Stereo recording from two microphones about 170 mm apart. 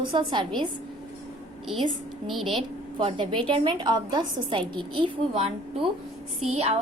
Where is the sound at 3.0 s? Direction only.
30° right (ahead or behind).